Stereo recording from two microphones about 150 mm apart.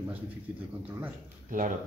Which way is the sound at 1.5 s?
60° right (ahead or behind).